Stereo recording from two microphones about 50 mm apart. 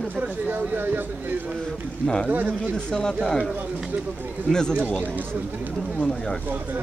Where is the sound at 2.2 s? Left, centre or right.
Right.